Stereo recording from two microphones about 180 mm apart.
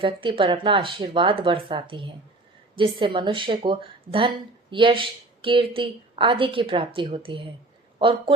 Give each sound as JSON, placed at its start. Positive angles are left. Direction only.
{"t": 0.0, "sound": "a woman's voice", "side_deg": -30}